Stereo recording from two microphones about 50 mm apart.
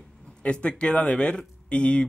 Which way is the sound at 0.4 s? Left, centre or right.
Left.